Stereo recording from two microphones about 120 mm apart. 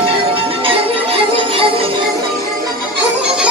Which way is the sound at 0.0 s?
50° right (ahead or behind).